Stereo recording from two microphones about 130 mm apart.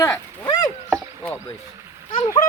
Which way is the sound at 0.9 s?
10° left (ahead or behind).